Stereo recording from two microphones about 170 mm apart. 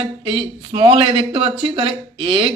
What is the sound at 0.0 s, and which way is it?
A man's voice, 30° right (ahead or behind).